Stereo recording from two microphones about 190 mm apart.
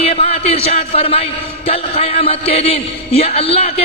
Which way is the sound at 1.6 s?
30° left (ahead or behind).